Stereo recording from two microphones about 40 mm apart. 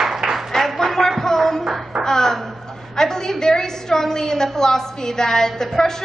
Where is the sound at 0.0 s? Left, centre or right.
Centre.